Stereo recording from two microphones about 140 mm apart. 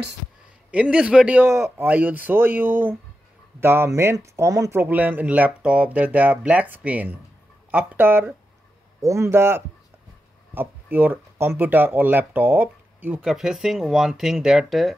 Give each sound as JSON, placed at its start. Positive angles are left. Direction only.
{"t": 0.7, "sound": "speech", "side_deg": -10}